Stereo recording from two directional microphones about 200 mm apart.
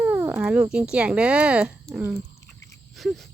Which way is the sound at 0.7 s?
5° right (ahead or behind).